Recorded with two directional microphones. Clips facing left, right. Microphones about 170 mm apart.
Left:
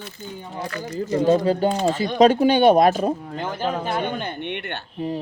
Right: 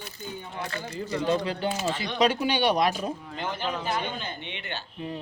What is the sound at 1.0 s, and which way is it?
Speech, 40° left (ahead or behind).